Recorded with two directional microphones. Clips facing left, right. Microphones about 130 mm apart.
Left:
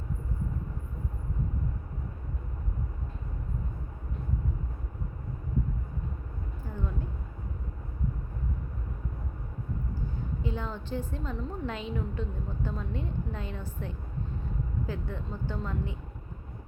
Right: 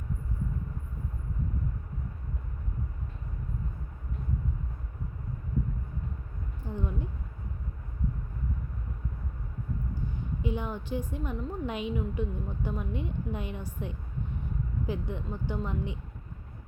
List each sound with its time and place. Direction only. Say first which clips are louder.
6.7 s speech: right 3 dB; 20° right (ahead or behind)
10.4 s a woman's voice: right 3 dB; 15° right (ahead or behind)